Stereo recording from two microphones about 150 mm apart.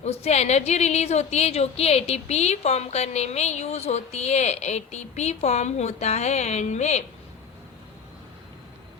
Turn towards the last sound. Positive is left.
turn(degrees=50)  # may be behind; listen again after turning